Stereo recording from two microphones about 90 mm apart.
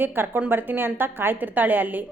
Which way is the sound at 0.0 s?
20° right (ahead or behind).